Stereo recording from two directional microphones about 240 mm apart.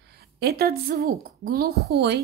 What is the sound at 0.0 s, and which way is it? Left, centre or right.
A woman's voice, right.